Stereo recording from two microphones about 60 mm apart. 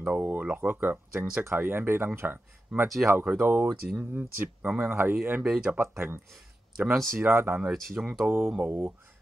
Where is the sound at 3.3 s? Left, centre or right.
Right.